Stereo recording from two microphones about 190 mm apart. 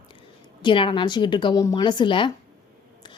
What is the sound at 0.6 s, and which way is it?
A woman's voice, 25° left (ahead or behind).